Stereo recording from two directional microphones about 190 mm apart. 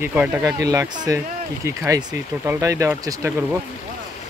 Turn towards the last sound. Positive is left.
turn(degrees=-15)  # may be behind; listen again after turning